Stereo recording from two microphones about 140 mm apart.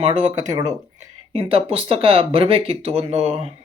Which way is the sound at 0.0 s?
45° right (ahead or behind).